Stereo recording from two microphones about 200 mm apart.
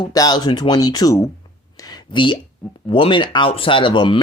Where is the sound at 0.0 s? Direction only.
20° left (ahead or behind).